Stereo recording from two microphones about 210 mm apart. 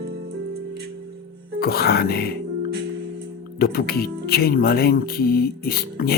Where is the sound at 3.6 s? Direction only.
45° left (ahead or behind).